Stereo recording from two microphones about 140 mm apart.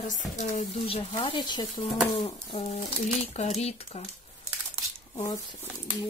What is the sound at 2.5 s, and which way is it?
Speech, 45° left (ahead or behind).